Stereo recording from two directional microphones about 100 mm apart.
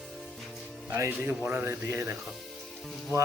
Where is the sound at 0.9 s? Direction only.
25° right (ahead or behind).